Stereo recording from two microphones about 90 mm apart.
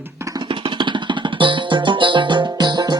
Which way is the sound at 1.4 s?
65° right (ahead or behind).